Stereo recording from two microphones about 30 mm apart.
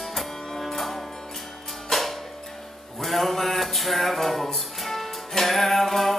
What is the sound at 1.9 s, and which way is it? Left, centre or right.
Music, centre.